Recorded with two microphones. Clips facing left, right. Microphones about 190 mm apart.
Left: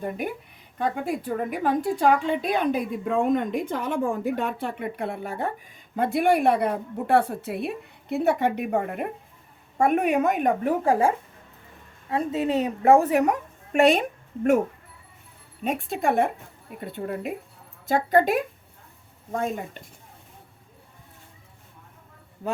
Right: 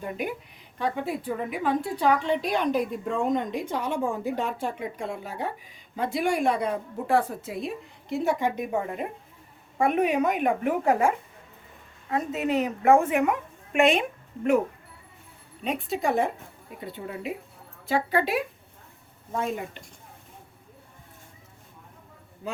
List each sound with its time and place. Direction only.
0.0 s a woman's voice: 50° left (ahead or behind)
9.7 s a woman's voice: 45° left (ahead or behind)
12.1 s a woman's voice: 30° left (ahead or behind)
15.6 s a woman's voice: 50° left (ahead or behind)